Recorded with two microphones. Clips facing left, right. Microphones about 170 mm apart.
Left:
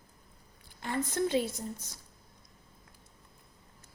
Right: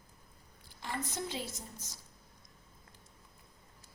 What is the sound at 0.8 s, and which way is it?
A woman's voice, 55° left (ahead or behind).